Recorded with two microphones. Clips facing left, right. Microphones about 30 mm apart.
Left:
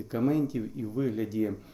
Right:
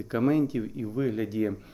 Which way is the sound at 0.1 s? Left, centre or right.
Right.